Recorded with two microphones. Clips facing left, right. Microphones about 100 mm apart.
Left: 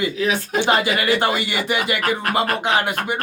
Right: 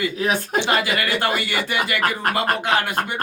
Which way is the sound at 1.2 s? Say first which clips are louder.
Left 2 dB; 20° left (ahead or behind).